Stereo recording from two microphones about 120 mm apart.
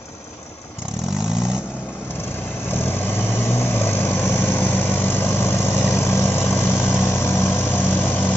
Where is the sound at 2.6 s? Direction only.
15° left (ahead or behind).